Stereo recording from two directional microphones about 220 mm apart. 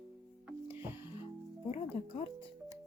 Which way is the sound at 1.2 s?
25° left (ahead or behind).